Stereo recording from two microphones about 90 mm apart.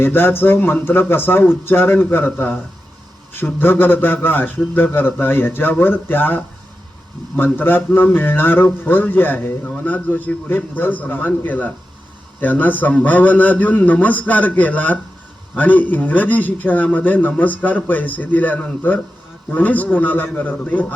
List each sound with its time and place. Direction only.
0.0 s a man's voice: 25° left (ahead or behind)